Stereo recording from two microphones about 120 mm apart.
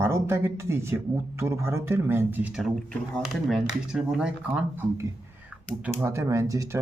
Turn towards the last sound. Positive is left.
turn(degrees=-25)  # may be behind; listen again after turning